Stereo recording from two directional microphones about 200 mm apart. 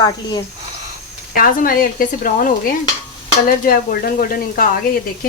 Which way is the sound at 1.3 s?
45° left (ahead or behind).